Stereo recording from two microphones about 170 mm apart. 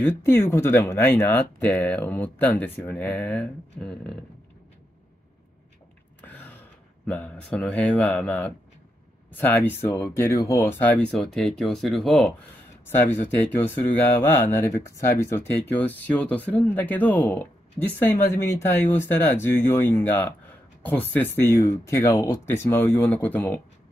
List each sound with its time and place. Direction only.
0.0 s speech: 15° left (ahead or behind)
6.2 s gasp: 10° left (ahead or behind)
7.1 s speech: 5° left (ahead or behind)
12.9 s speech: 15° left (ahead or behind)